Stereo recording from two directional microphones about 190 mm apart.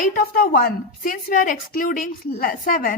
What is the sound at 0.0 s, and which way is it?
A woman's voice, 50° left (ahead or behind).